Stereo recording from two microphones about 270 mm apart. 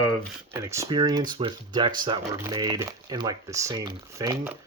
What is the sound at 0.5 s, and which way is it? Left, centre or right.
Speech, centre.